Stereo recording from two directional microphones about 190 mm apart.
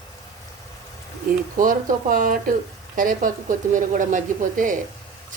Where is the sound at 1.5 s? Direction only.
45° right (ahead or behind).